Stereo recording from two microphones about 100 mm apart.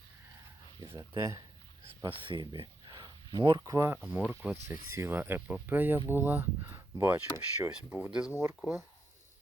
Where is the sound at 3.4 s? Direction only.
40° right (ahead or behind).